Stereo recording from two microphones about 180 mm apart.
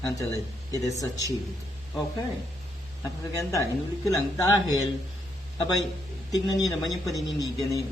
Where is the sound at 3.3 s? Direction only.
20° left (ahead or behind).